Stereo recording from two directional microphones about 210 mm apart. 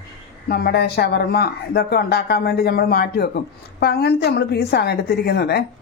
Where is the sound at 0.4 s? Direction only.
45° left (ahead or behind).